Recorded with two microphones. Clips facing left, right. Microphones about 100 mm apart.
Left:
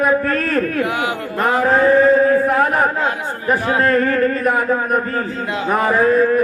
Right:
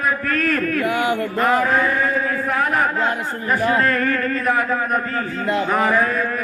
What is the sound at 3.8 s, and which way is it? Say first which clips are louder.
A man's voice: left 5 dB; 30° left (ahead or behind).